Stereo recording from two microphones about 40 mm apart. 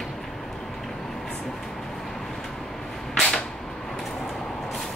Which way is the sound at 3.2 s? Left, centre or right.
Left.